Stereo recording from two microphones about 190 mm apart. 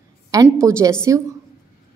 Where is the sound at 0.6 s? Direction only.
15° right (ahead or behind).